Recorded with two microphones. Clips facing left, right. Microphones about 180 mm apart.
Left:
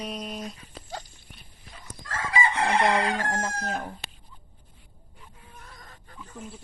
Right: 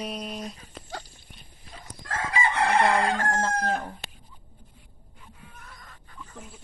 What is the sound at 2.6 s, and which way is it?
Chicken, 55° left (ahead or behind).